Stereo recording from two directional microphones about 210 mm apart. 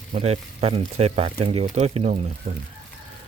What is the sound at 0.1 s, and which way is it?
Speech, 30° right (ahead or behind).